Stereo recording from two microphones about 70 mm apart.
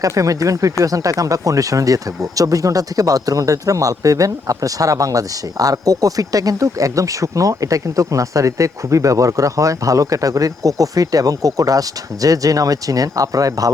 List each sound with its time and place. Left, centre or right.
0.0 s speech: right